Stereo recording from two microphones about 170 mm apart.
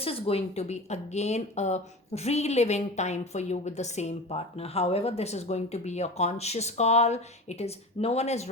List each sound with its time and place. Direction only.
0.0 s speech: 35° left (ahead or behind)